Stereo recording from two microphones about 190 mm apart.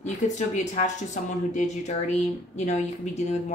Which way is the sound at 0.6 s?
40° left (ahead or behind).